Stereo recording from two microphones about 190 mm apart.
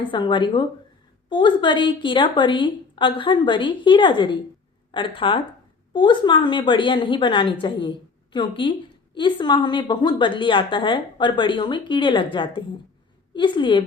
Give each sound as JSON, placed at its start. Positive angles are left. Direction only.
{"t": 0.0, "sound": "a woman's voice", "side_deg": 25}